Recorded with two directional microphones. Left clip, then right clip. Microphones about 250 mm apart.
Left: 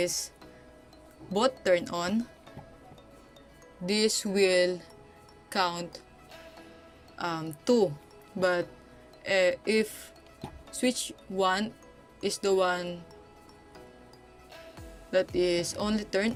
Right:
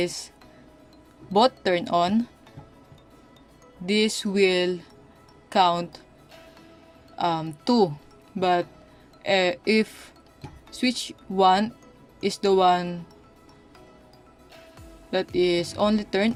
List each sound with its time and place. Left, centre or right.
0.0 s speech: centre
1.3 s speech: centre
3.8 s speech: centre
7.2 s speech: centre
15.1 s speech: centre